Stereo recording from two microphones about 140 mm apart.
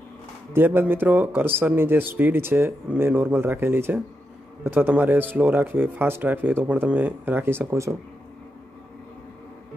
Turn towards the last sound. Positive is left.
turn(degrees=-15)  # may be behind; listen again after turning